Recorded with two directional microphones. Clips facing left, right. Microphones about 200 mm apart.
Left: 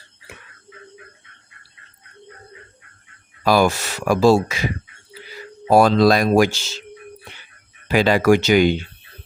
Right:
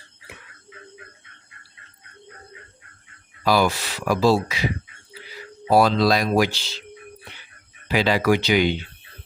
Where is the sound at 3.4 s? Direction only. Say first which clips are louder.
Left 3 dB; 50° left (ahead or behind).